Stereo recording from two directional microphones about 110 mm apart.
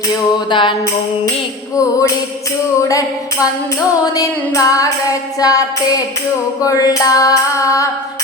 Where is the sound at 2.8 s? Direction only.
30° left (ahead or behind).